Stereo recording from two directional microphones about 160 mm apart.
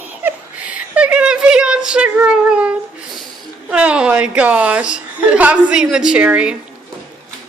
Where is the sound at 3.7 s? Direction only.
5° right (ahead or behind).